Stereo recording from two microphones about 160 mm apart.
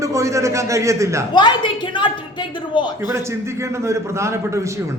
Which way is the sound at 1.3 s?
30° left (ahead or behind).